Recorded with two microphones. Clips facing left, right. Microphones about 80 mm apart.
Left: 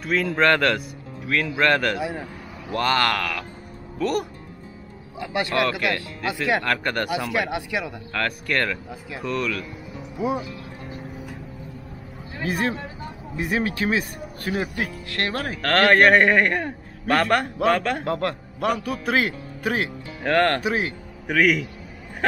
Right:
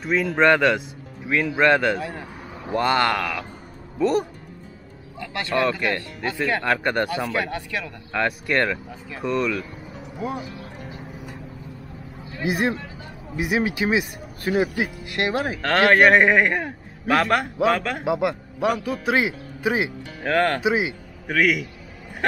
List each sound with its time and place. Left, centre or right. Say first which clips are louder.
0.1 s a man's voice: right 2 dB; centre
2.0 s speech: left 3 dB; centre
2.7 s speech: right 1 dB; centre
4.0 s a man's voice: right 3 dB; right
5.2 s speech: left 5 dB; centre
6.6 s a man's voice: right 3 dB; centre
7.1 s speech: left 1 dB; centre
8.1 s a man's voice: right 3 dB; centre
10.1 s speech: left 4 dB; centre
12.4 s speech: right 2 dB; centre
14.8 s a man's voice: right 2 dB; centre
20.6 s speech: right 3 dB; centre
21.3 s a man's voice: left 1 dB; centre